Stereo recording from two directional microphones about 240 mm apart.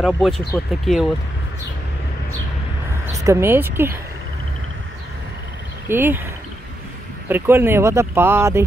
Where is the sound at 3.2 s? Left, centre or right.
Centre.